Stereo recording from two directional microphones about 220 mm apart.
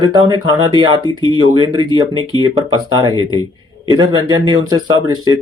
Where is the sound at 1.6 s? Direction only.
20° right (ahead or behind).